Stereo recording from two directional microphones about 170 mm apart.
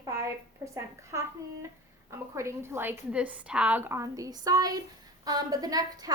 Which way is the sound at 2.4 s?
15° right (ahead or behind).